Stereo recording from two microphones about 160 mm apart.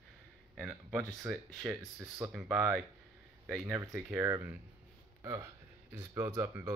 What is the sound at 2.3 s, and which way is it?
Speech, 5° right (ahead or behind).